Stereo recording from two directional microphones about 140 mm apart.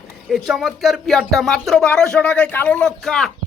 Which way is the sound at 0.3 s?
Centre (ahead or behind).